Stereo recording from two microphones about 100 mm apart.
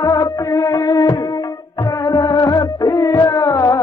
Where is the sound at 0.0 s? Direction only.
35° left (ahead or behind).